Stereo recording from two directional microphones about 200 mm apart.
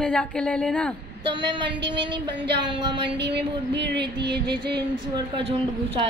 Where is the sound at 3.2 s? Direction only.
60° right (ahead or behind).